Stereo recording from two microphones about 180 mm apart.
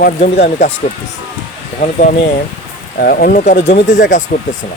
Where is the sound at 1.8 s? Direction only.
45° left (ahead or behind).